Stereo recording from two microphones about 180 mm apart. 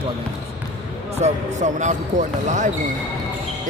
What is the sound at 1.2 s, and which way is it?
Speech, 40° right (ahead or behind).